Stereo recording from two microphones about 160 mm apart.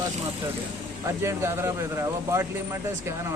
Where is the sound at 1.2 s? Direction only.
15° right (ahead or behind).